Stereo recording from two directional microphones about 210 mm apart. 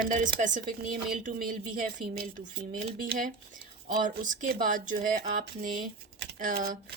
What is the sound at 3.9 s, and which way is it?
Speech, 40° right (ahead or behind).